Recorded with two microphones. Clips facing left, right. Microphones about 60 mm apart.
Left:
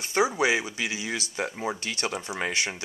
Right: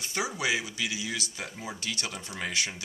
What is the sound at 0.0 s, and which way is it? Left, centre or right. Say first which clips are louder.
Speech: left 7 dB; left.